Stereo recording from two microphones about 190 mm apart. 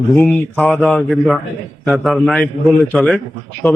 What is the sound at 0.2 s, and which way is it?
A man's voice, 5° left (ahead or behind).